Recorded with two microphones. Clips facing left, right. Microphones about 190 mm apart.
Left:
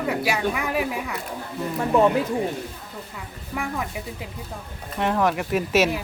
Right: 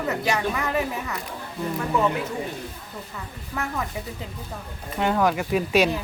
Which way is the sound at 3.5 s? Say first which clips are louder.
Left 1 dB; 10° left (ahead or behind).